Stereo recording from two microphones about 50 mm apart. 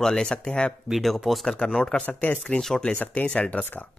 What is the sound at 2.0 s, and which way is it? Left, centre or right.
Speech, left.